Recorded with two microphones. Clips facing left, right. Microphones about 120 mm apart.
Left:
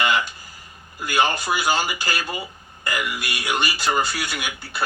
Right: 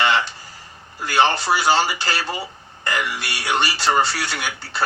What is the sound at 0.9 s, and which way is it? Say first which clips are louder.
Speech: right 3 dB; 30° right (ahead or behind).